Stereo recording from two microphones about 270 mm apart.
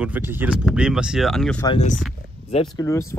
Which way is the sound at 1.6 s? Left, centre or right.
Left.